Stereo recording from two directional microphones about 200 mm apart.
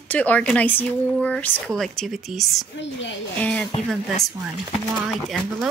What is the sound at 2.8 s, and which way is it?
Speech, 65° left (ahead or behind).